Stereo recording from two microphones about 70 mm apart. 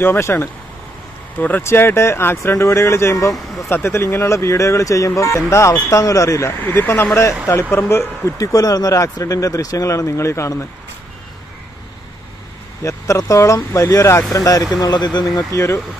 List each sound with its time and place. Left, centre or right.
0.0 s speech: left
1.6 s speech: left
6.6 s speech: left
8.4 s speech: left
12.8 s speech: left
14.7 s speech: left
15.5 s speech: left